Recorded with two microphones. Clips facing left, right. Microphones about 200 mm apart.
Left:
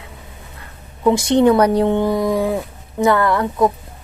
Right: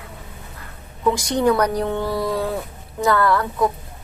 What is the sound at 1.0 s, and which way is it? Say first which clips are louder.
A woman's voice: left 5 dB; 25° left (ahead or behind).